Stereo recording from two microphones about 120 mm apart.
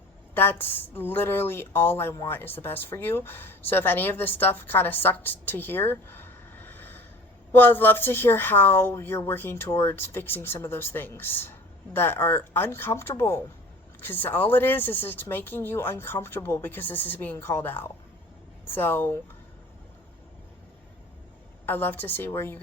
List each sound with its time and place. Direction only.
0.3 s speech: 15° left (ahead or behind)
21.7 s speech: 15° left (ahead or behind)